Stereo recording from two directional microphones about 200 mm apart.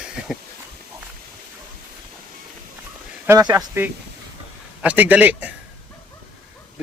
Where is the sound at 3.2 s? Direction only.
15° right (ahead or behind).